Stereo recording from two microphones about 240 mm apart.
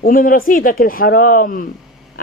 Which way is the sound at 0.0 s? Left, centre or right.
Left.